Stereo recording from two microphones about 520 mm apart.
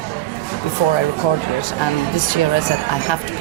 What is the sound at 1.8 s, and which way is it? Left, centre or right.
Speech, left.